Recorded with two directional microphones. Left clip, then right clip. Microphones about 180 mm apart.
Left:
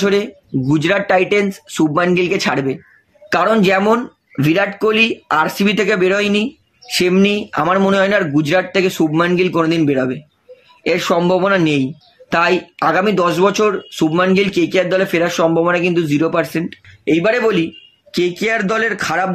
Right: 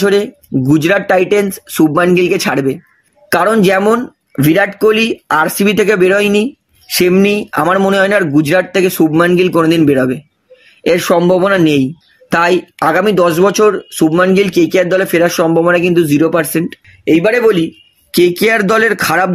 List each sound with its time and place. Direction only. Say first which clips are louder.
0.0 s speech: right 4 dB; 45° right (ahead or behind)